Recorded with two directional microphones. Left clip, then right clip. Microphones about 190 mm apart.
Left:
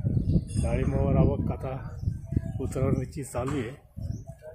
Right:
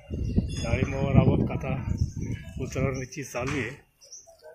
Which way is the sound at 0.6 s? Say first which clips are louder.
Even; 15° left (ahead or behind).